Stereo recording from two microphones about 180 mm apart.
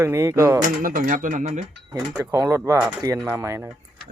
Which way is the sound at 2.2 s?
15° right (ahead or behind).